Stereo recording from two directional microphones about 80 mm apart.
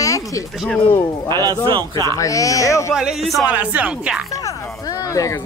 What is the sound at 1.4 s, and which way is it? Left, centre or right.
Speech, right.